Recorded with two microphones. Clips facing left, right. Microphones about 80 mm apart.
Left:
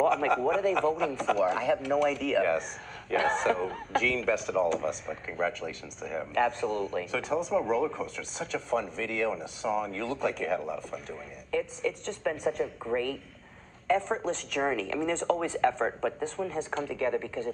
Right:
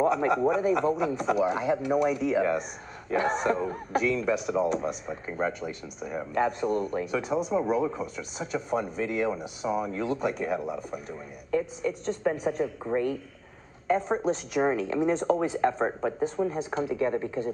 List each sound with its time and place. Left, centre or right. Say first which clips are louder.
0.0 s a man's voice: right 1 dB; centre
11.8 s a man's voice: right 1 dB; centre
12.4 s a man's voice: right 1 dB; centre